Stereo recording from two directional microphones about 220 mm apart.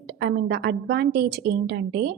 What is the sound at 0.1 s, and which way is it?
A woman's voice, 50° right (ahead or behind).